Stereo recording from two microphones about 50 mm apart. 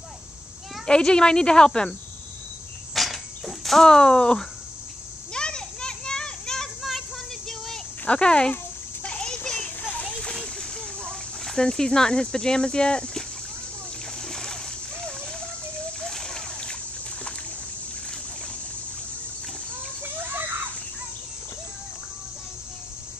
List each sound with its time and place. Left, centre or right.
0.8 s speech: centre
2.9 s cricket: centre
5.3 s children playing: centre
7.4 s a sound: centre
8.0 s speech: left
9.0 s children playing: left
10.0 s splash: centre
10.4 s a sound: centre
14.2 s splash: centre
20.0 s children playing: right